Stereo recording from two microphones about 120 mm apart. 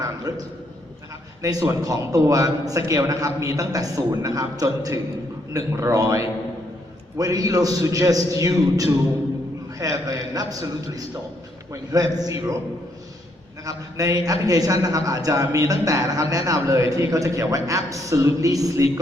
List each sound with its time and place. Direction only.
0.0 s a sound: 30° right (ahead or behind)
1.4 s a man's voice: 30° right (ahead or behind)
13.7 s a man's voice: 30° right (ahead or behind)